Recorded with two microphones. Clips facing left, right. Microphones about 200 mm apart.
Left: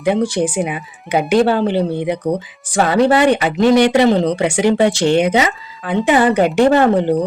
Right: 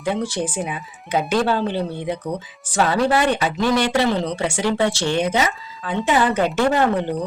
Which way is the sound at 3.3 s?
65° left (ahead or behind).